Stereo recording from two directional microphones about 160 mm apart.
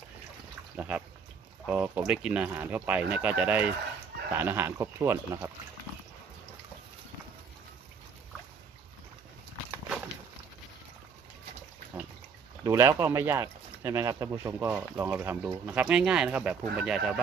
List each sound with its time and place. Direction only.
0.8 s speech: 10° right (ahead or behind)
12.6 s speech: 15° right (ahead or behind)